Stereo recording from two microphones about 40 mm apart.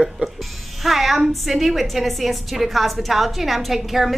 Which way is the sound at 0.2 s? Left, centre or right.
Right.